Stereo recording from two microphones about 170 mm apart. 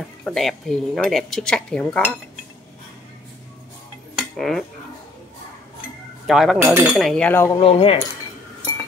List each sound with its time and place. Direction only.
0.2 s speech: centre (ahead or behind)
4.1 s cutlery: centre (ahead or behind)
6.2 s speech: centre (ahead or behind)
6.6 s speech: 15° right (ahead or behind)
6.9 s cutlery: centre (ahead or behind)
7.5 s speech: 35° left (ahead or behind)